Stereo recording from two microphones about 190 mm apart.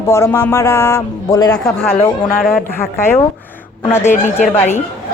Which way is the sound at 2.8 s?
10° left (ahead or behind).